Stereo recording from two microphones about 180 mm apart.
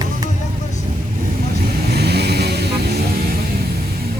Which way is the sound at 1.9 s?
65° right (ahead or behind).